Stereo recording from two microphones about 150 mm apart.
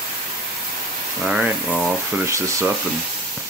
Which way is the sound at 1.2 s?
5° right (ahead or behind).